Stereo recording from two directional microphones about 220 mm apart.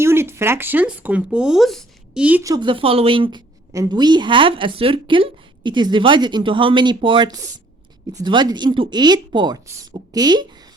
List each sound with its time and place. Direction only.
0.0 s speech: 10° right (ahead or behind)